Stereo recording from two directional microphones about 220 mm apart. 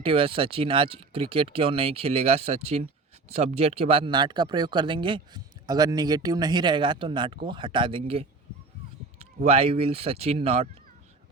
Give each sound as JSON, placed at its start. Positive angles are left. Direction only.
{"t": 0.0, "sound": "speech", "side_deg": -25}